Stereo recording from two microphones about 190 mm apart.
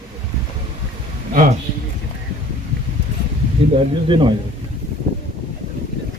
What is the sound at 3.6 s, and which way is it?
Speech, 30° right (ahead or behind).